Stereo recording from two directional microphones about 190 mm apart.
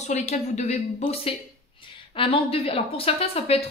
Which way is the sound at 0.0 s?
35° left (ahead or behind).